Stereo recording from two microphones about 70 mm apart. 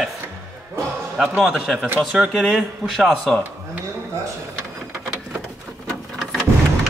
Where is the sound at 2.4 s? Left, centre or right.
Centre.